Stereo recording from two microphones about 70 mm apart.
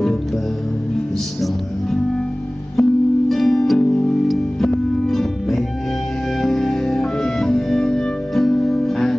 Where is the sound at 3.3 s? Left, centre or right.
Centre.